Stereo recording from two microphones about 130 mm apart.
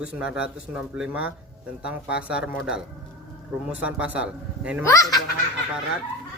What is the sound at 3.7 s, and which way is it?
Speech, 10° right (ahead or behind).